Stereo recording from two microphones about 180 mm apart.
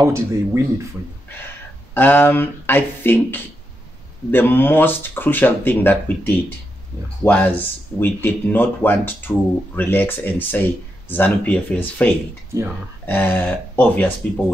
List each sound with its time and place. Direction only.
0.0 s speech: 15° right (ahead or behind)
2.0 s speech: 10° left (ahead or behind)